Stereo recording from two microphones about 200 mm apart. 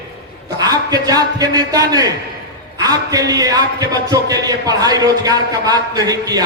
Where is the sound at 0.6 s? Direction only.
20° right (ahead or behind).